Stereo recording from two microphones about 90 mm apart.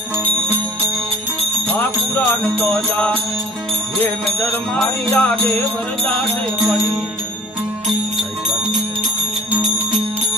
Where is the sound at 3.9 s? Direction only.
20° left (ahead or behind).